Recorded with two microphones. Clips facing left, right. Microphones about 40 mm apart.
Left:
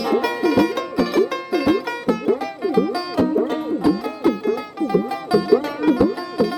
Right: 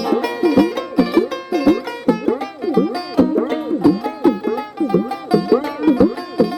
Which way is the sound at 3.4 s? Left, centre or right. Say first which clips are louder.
Right 2 dB; right.